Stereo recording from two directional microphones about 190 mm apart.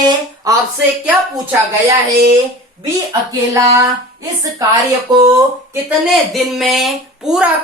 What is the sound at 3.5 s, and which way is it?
A woman's voice, 15° right (ahead or behind).